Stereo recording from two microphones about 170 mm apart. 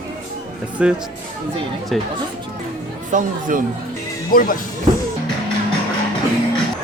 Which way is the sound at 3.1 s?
50° right (ahead or behind).